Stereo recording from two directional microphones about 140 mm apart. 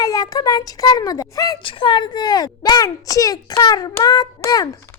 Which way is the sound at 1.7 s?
35° left (ahead or behind).